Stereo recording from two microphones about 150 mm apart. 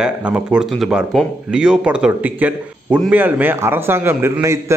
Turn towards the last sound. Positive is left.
turn(degrees=-15)  # may be behind; listen again after turning